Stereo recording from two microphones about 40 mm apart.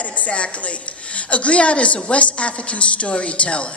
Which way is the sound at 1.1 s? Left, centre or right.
Left.